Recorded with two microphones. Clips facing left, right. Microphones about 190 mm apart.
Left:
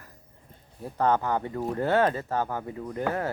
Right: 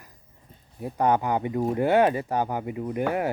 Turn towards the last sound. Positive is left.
turn(degrees=-15)  # may be behind; listen again after turning